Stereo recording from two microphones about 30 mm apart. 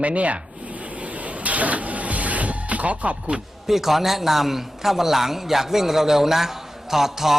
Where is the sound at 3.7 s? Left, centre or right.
Centre.